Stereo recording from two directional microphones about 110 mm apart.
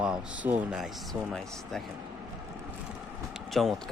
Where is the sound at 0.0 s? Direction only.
10° right (ahead or behind).